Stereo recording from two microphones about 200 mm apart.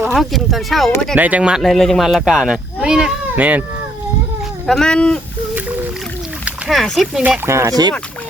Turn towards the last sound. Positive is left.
turn(degrees=-15)  # may be behind; listen again after turning